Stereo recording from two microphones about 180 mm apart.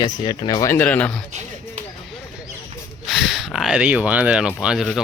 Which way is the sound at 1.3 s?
40° right (ahead or behind).